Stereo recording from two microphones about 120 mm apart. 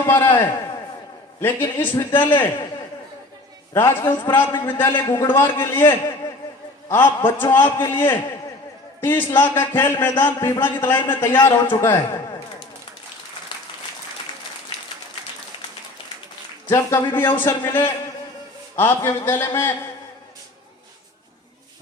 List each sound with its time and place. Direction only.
0.0 s a man's voice: 20° left (ahead or behind)
3.8 s a man's voice: 20° left (ahead or behind)
13.5 s applause: 40° left (ahead or behind)
16.6 s a man's voice: 20° left (ahead or behind)